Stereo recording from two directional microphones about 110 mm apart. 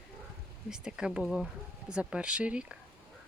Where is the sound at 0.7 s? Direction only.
5° right (ahead or behind).